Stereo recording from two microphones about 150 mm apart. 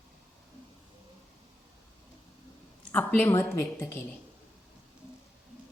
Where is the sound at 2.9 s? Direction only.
10° left (ahead or behind).